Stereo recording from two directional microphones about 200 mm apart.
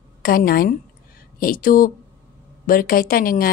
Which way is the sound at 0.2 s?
45° left (ahead or behind).